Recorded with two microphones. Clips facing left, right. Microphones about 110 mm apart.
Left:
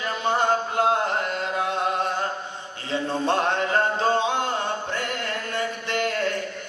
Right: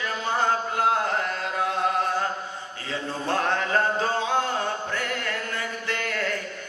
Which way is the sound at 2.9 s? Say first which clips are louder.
Left 4 dB; 25° left (ahead or behind).